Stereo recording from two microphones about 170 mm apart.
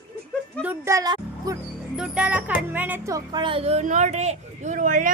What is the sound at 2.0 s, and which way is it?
Speech, 5° right (ahead or behind).